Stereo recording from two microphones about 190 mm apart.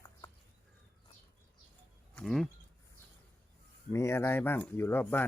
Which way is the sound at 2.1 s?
Centre (ahead or behind).